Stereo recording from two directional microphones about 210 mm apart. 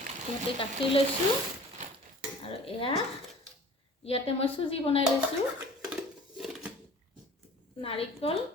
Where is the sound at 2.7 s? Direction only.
25° left (ahead or behind).